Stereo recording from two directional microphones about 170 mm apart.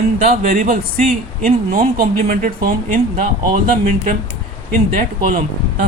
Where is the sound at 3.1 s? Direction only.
45° right (ahead or behind).